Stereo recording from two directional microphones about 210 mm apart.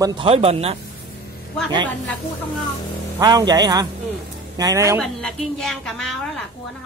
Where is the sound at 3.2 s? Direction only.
20° right (ahead or behind).